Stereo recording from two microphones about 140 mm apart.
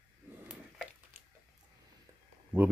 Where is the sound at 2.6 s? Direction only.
10° right (ahead or behind).